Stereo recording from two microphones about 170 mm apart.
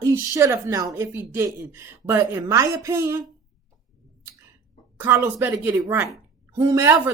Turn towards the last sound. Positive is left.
turn(degrees=-15)  # may be behind; listen again after turning